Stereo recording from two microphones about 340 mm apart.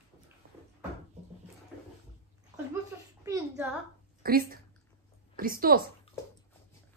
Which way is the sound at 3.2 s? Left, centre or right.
Centre.